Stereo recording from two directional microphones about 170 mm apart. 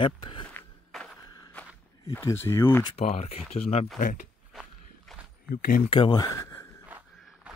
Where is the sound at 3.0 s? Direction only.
40° left (ahead or behind).